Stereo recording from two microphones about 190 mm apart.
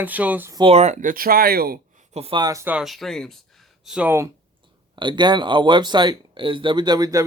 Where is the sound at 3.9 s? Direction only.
5° right (ahead or behind).